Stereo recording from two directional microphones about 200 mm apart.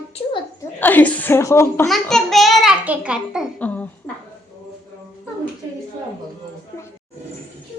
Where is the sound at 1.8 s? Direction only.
Centre (ahead or behind).